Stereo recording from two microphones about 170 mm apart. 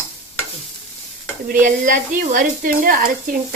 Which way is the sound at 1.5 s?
50° right (ahead or behind).